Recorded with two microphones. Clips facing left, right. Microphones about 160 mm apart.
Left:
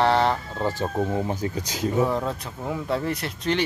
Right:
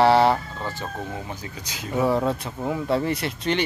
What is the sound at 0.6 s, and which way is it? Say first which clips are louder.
Speech: left 6 dB; 35° left (ahead or behind).